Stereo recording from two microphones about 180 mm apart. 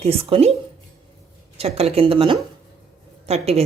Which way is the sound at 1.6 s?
35° right (ahead or behind).